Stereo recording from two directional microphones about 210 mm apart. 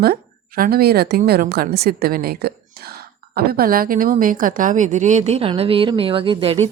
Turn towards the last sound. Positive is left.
turn(degrees=-25)  # may be behind; listen again after turning